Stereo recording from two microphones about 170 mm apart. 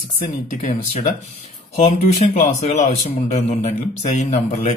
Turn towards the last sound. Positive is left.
turn(degrees=40)  # may be behind; listen again after turning